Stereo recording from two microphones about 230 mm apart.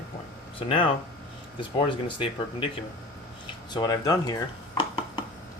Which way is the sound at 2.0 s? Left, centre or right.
Left.